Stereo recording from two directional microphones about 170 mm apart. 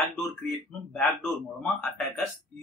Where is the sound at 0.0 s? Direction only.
Centre (ahead or behind).